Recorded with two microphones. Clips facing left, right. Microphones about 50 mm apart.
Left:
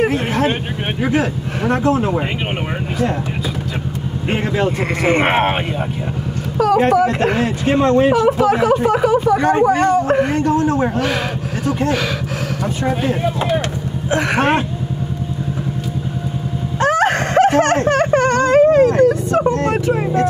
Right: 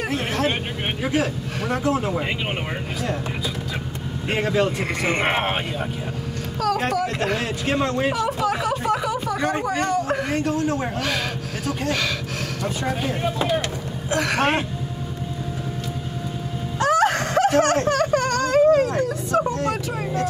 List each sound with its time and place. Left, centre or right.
0.0 s vehicle: left
1.1 s speech: left
4.3 s speech: left
6.8 s speech: left
14.1 s speech: left
16.8 s whimper: left